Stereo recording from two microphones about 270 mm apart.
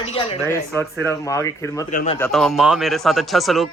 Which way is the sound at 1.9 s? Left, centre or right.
Left.